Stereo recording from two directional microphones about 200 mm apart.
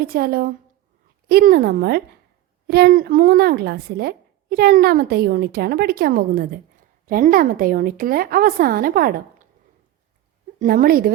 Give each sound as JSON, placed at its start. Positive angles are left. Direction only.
{"t": 0.0, "sound": "speech", "side_deg": -50}
{"t": 10.6, "sound": "speech", "side_deg": -45}